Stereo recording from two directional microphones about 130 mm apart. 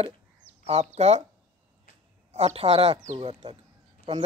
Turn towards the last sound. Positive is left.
turn(degrees=-50)  # may be behind; listen again after turning